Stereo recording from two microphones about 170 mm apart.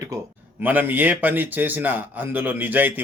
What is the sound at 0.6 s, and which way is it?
Speech, 10° right (ahead or behind).